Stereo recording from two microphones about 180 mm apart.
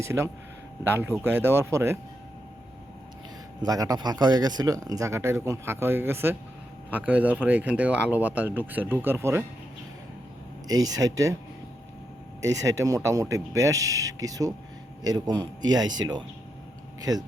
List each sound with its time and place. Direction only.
0.0 s speech: 15° right (ahead or behind)
3.6 s speech: 20° right (ahead or behind)
10.7 s speech: 20° right (ahead or behind)
12.4 s speech: 15° right (ahead or behind)